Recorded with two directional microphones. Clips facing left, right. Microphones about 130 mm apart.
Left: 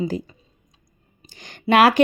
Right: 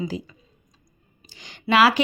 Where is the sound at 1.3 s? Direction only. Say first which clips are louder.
Left 3 dB; 50° left (ahead or behind).